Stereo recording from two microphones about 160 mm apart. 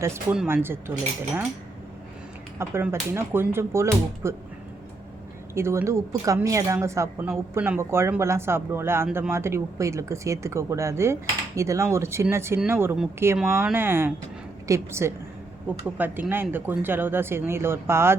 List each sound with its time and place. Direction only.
0.4 s speech: 15° right (ahead or behind)
2.6 s speech: 15° right (ahead or behind)
5.5 s speech: 15° right (ahead or behind)